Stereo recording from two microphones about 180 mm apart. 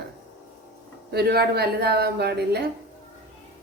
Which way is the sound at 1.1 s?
60° right (ahead or behind).